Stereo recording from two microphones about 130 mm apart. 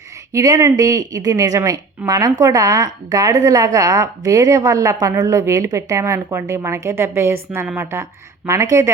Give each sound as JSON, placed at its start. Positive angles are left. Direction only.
{"t": 0.3, "sound": "a woman's voice", "side_deg": -25}